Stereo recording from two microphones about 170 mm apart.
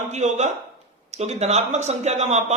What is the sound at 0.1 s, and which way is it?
A man's voice, 45° right (ahead or behind).